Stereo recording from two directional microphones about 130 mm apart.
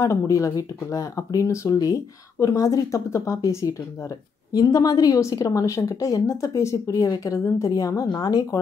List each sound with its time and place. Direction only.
0.0 s speech: 25° left (ahead or behind)